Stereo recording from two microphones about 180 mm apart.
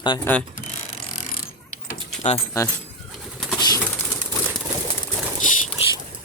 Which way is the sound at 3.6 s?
15° left (ahead or behind).